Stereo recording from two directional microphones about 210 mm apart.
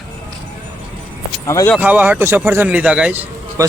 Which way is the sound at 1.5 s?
15° left (ahead or behind).